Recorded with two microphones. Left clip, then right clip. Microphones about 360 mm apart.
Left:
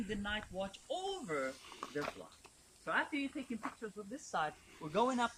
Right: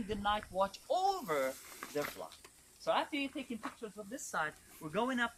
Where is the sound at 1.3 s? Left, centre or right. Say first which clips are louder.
Right 4 dB; right.